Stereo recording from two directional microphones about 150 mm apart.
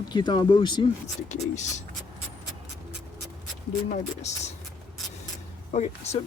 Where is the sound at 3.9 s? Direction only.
50° left (ahead or behind).